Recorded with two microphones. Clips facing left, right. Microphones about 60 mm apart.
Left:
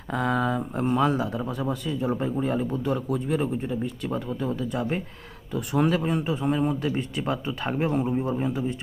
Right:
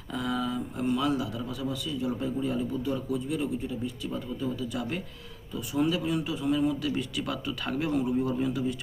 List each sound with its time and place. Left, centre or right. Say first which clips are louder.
0.1 s speech: left 6 dB; left
3.3 s speech: left 5 dB; left
5.5 s speech: left 4 dB; left